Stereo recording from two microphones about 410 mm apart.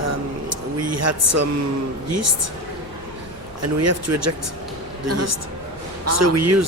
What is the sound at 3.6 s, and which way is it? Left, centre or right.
Speech, right.